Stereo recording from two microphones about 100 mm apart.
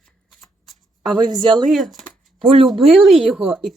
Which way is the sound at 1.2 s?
45° right (ahead or behind).